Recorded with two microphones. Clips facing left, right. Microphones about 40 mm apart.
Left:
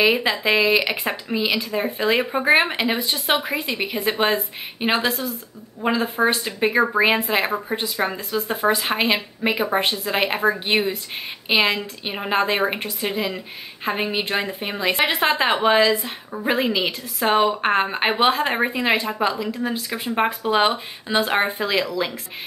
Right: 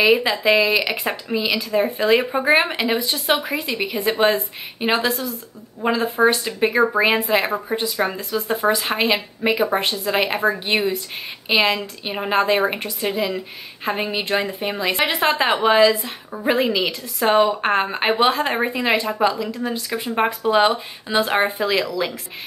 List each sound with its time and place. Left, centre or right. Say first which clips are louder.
0.0 s a woman's voice: right 2 dB; centre